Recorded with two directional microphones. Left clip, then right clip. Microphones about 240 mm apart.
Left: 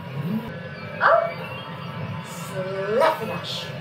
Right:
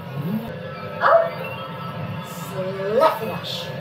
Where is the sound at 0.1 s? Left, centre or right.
Centre.